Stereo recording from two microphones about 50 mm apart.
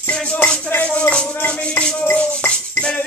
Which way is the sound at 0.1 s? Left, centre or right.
Left.